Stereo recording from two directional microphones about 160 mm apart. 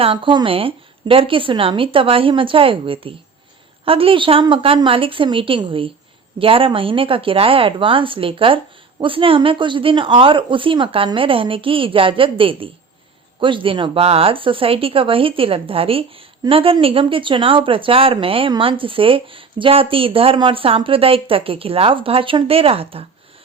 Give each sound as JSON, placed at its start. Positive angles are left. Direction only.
{"t": 0.0, "sound": "speech", "side_deg": -35}